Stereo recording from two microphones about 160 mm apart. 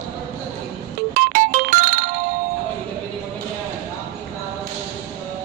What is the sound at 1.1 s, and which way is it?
Music, 55° right (ahead or behind).